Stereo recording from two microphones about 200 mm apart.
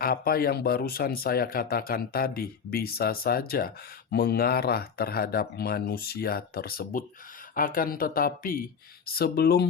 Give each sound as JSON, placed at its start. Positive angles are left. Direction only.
{"t": 0.0, "sound": "speech", "side_deg": 50}